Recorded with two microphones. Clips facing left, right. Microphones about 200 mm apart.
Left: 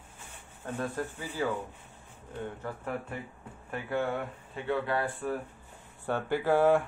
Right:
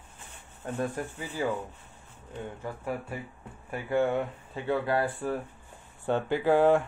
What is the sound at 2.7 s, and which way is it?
Speech, 15° right (ahead or behind).